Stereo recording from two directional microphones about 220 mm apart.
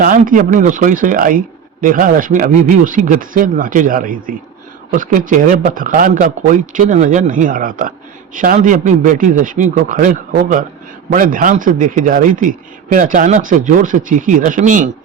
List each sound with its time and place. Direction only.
0.0 s speech: 40° right (ahead or behind)